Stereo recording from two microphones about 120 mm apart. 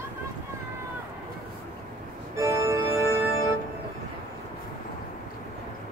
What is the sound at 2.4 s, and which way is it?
Organ, 25° right (ahead or behind).